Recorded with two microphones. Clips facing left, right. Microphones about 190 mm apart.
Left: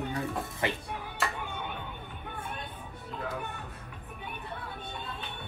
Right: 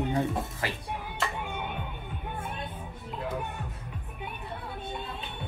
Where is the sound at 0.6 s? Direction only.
25° left (ahead or behind).